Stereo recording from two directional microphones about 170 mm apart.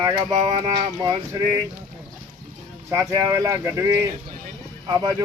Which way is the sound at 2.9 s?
15° right (ahead or behind).